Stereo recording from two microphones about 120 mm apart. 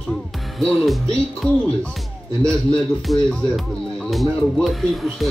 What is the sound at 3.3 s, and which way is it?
Speech, 5° left (ahead or behind).